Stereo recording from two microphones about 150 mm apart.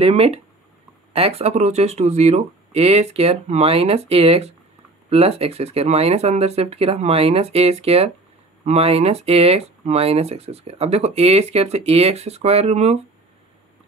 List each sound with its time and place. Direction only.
0.0 s speech: 40° right (ahead or behind)